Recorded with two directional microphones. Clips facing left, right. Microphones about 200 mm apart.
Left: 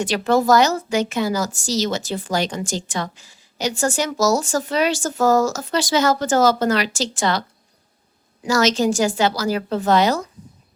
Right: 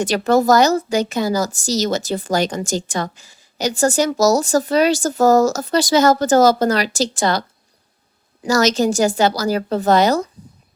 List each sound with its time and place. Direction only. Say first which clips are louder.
0.0 s a woman's voice: right 3 dB; 45° right (ahead or behind)
8.4 s a woman's voice: right 2 dB; 40° right (ahead or behind)